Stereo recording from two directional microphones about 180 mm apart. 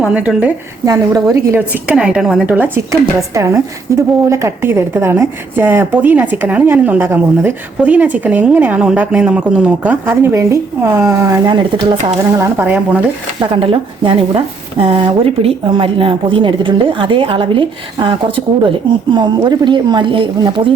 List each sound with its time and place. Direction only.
0.0 s a woman's voice: 5° right (ahead or behind)
0.9 s a woman's voice: 20° right (ahead or behind)
11.4 s a woman's voice: 25° right (ahead or behind); by 13.0 s 10° right (ahead or behind)
13.4 s speech: 30° right (ahead or behind)